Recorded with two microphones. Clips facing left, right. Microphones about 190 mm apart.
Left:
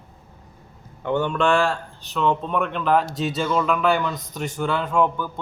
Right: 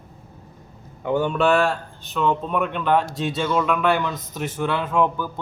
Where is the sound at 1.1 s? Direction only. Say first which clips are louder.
Right 1 dB; 5° right (ahead or behind).